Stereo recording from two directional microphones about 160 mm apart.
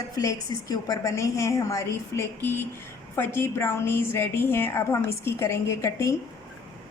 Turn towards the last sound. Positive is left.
turn(degrees=20)  # may be behind; listen again after turning